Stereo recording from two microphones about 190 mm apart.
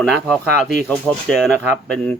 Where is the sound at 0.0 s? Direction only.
5° left (ahead or behind).